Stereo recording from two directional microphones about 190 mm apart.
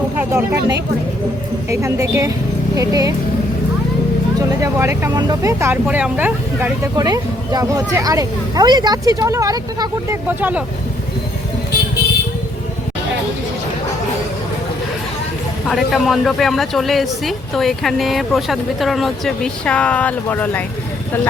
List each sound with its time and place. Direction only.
0.3 s speech: 15° right (ahead or behind)
4.4 s speech: 15° right (ahead or behind)
10.2 s speech: 10° right (ahead or behind)
15.7 s a woman's voice: centre (ahead or behind)